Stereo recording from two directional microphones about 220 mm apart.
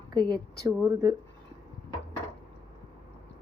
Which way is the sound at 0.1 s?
20° right (ahead or behind).